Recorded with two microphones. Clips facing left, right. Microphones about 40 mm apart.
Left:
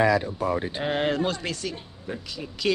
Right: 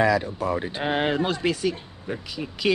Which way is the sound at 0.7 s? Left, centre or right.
Centre.